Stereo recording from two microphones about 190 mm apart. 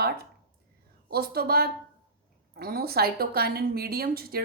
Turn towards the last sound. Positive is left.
turn(degrees=-55)  # may be behind; listen again after turning